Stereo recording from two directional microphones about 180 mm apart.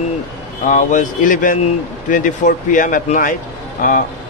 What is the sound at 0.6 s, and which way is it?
Speech, 45° left (ahead or behind).